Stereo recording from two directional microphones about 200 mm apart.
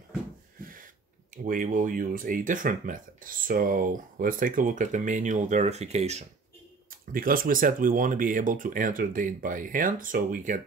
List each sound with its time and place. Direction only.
0.6 s snort: 45° right (ahead or behind)
1.3 s speech: 40° right (ahead or behind)
7.1 s speech: 45° right (ahead or behind)